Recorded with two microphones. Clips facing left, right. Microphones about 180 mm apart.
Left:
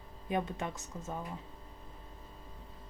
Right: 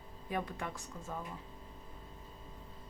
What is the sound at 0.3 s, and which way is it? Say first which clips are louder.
Speech: left 4 dB; 20° left (ahead or behind).